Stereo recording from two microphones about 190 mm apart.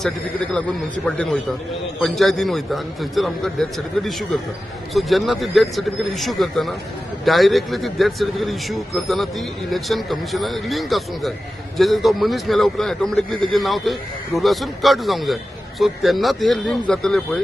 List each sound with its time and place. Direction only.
0.0 s speech: 5° left (ahead or behind)